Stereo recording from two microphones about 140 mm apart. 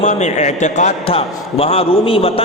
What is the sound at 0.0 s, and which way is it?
A man's voice, 55° left (ahead or behind).